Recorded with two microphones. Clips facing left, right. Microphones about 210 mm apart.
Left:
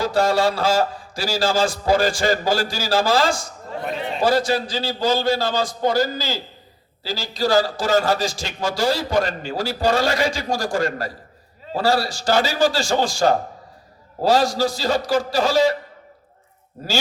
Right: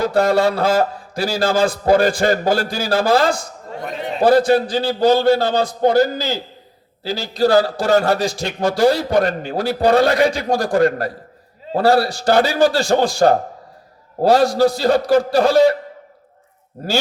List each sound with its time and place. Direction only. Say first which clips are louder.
0.0 s a man's voice: right 3 dB; 55° right (ahead or behind)